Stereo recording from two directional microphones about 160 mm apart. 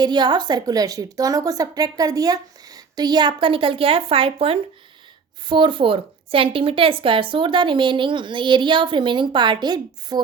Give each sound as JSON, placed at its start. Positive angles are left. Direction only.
{"t": 0.0, "sound": "a woman's voice", "side_deg": -25}